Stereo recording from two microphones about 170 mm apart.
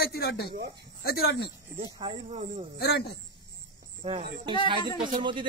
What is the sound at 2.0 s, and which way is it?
Speech, 35° right (ahead or behind).